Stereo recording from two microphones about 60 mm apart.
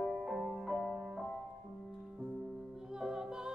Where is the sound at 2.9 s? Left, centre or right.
Centre.